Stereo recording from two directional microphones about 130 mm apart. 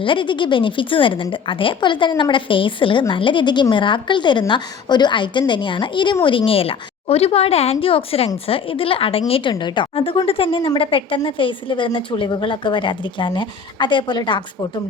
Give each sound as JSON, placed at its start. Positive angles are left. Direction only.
{"t": 0.0, "sound": "a woman's voice", "side_deg": 40}